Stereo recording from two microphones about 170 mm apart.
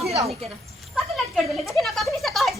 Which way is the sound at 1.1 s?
Centre (ahead or behind).